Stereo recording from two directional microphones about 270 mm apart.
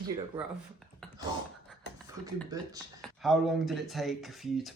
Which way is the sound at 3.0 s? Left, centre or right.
Centre.